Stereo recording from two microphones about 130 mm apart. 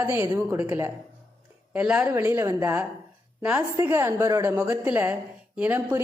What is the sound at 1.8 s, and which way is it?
A woman's voice, 10° right (ahead or behind).